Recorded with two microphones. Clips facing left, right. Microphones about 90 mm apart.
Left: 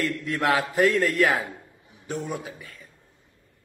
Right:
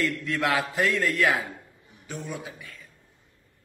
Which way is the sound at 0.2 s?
35° left (ahead or behind).